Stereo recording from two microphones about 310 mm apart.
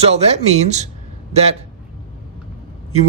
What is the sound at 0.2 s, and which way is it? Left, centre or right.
Speech, right.